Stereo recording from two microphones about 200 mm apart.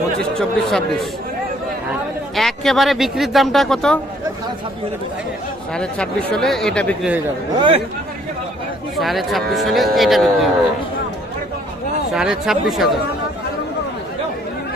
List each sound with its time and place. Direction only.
0.2 s speech: centre (ahead or behind)
6.3 s speech: centre (ahead or behind)
7.5 s speech: 25° right (ahead or behind)
8.9 s speech: centre (ahead or behind)
12.1 s speech: 5° right (ahead or behind)